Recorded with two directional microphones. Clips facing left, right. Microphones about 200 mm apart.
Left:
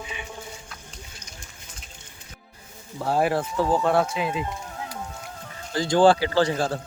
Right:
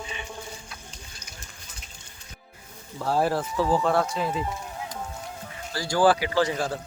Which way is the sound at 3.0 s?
15° left (ahead or behind).